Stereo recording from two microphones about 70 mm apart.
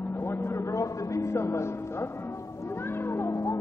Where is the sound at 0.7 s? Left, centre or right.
Left.